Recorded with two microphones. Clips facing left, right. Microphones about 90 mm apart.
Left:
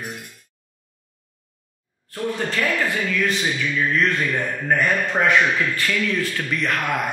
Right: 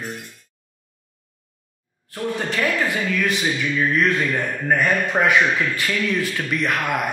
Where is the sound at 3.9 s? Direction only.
5° right (ahead or behind).